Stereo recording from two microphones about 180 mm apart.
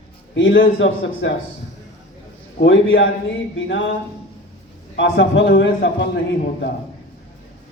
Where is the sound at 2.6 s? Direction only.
85° left.